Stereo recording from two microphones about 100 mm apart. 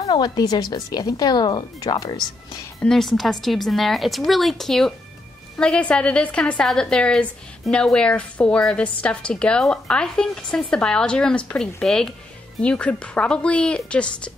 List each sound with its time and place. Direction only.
0.1 s speech: 45° left (ahead or behind)
2.8 s a woman's voice: 5° left (ahead or behind)